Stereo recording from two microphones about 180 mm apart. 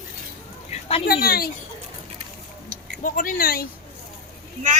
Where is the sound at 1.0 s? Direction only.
55° left (ahead or behind).